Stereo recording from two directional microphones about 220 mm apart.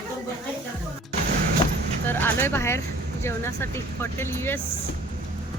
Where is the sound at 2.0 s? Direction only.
10° left (ahead or behind).